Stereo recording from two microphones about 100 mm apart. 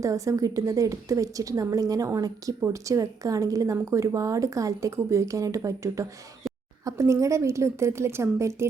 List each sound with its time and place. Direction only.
0.0 s a woman's voice: 30° right (ahead or behind)